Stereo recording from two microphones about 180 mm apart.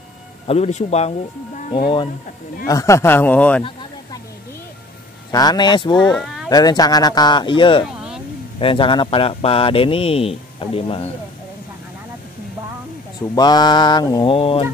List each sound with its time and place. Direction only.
0.5 s speech: 35° left (ahead or behind)
2.7 s a man's voice: 15° left (ahead or behind)
5.3 s mantra: 20° left (ahead or behind)
6.0 s speech: 5° left (ahead or behind)
6.5 s mantra: 20° left (ahead or behind)
7.8 s vehicle: 5° right (ahead or behind)
8.5 s speech: 30° left (ahead or behind)
13.3 s mantra: 20° left (ahead or behind)